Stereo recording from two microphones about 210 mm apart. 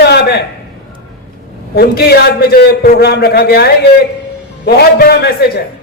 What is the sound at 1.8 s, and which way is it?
A man's voice, 50° left (ahead or behind).